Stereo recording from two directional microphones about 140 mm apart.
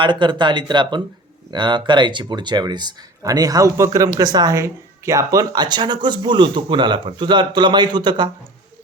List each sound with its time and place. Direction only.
0.0 s speech: 35° right (ahead or behind)